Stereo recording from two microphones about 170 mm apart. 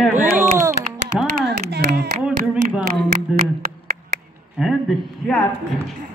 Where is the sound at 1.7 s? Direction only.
75° right (ahead or behind).